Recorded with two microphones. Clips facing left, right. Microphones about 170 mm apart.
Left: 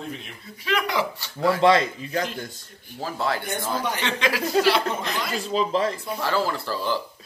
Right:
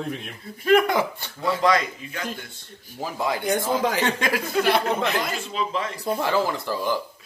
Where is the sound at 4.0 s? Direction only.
45° right (ahead or behind).